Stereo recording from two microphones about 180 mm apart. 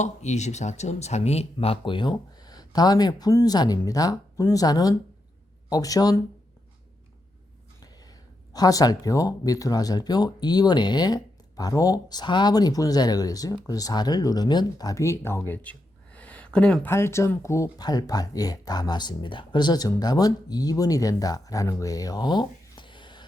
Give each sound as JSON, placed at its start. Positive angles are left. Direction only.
{"t": 0.0, "sound": "speech", "side_deg": 40}
{"t": 8.5, "sound": "speech", "side_deg": 20}